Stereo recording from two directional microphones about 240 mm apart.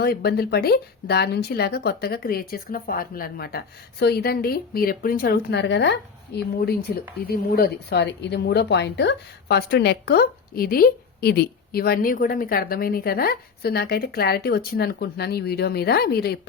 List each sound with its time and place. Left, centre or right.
0.0 s a woman's voice: left